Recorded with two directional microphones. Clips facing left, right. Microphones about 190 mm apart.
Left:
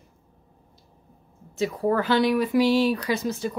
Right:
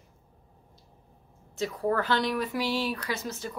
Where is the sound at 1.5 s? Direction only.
10° left (ahead or behind).